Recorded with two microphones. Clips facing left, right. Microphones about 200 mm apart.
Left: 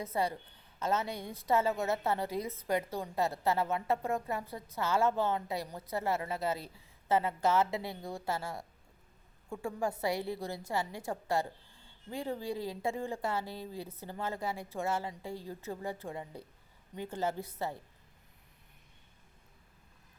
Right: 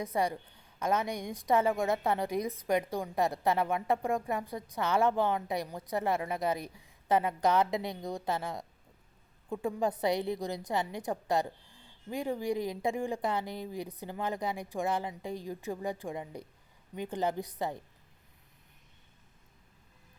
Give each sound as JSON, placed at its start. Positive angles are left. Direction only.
{"t": 0.0, "sound": "a woman's voice", "side_deg": -15}